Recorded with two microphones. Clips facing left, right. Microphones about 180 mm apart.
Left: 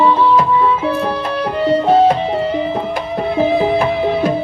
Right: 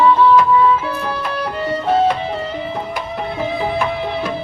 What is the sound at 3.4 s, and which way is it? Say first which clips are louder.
Music: left 7 dB; 35° left (ahead or behind).